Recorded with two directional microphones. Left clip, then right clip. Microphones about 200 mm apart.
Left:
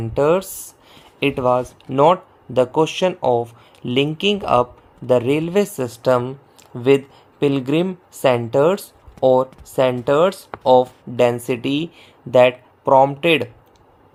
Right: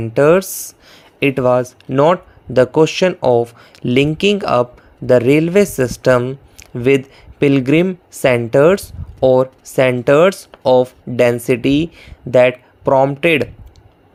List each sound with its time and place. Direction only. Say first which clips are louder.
0.0 s speech: right 5 dB; 20° right (ahead or behind)